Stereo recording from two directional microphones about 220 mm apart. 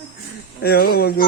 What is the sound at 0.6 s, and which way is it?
Speech, 45° left (ahead or behind).